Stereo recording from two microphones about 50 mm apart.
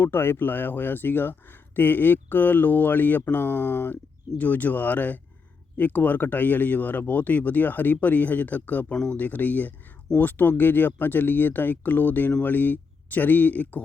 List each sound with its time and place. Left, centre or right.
0.0 s speech: left